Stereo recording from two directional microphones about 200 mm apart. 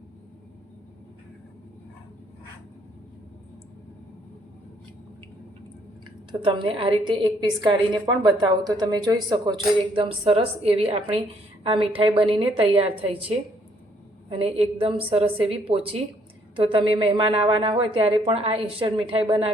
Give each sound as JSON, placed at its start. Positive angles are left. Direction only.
{"t": 6.4, "sound": "a woman's voice", "side_deg": -25}